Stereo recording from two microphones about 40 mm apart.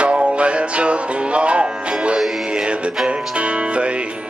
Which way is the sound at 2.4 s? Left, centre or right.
Right.